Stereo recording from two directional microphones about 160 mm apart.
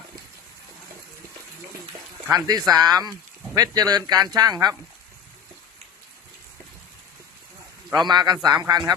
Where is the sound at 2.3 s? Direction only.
25° right (ahead or behind).